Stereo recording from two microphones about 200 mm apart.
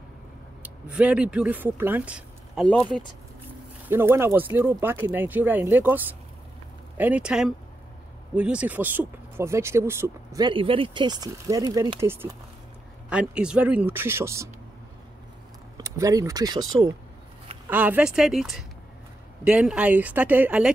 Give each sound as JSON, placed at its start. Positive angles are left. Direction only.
{"t": 0.6, "sound": "speech", "side_deg": -5}
{"t": 3.9, "sound": "speech", "side_deg": -10}
{"t": 15.8, "sound": "speech", "side_deg": -15}
{"t": 17.6, "sound": "speech", "side_deg": -10}